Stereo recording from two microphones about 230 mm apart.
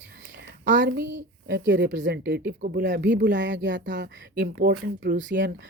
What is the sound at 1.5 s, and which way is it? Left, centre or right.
Speech, right.